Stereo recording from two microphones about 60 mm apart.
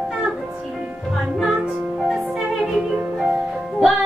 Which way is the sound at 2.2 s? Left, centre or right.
Centre.